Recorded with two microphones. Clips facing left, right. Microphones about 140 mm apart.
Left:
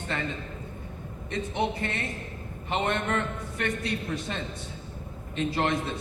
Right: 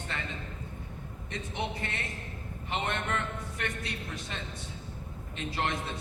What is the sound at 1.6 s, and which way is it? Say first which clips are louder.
A man's voice: left 6 dB; 30° left (ahead or behind).